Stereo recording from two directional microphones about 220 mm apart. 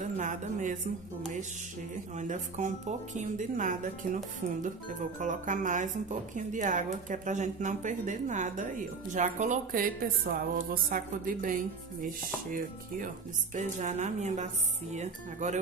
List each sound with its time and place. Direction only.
0.0 s speech: 35° right (ahead or behind)
2.1 s speech: 35° right (ahead or behind)
5.2 s speech: 35° right (ahead or behind)
13.6 s speech: 30° right (ahead or behind)